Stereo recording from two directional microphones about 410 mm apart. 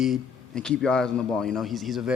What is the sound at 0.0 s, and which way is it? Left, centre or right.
A man's voice, centre.